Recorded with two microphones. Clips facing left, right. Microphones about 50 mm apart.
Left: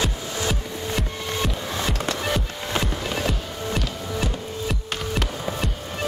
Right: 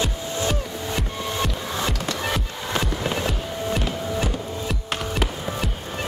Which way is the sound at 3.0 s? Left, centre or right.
Centre.